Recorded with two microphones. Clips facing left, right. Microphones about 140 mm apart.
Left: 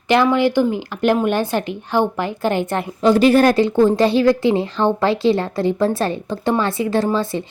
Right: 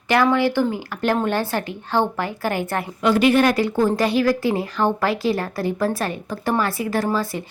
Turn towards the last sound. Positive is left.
turn(degrees=25)  # may be behind; listen again after turning